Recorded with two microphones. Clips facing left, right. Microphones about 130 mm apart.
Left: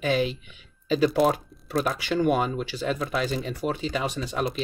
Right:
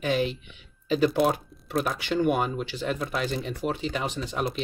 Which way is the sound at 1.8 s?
45° left (ahead or behind).